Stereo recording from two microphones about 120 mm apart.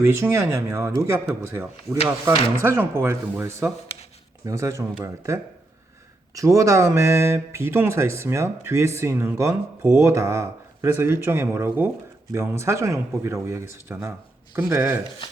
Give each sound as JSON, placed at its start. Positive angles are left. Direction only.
{"t": 0.0, "sound": "speech", "side_deg": -20}